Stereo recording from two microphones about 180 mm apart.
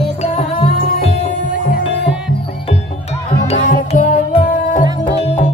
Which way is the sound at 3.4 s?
45° left (ahead or behind).